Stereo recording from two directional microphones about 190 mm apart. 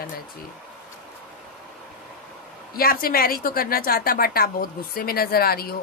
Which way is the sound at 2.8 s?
50° left (ahead or behind).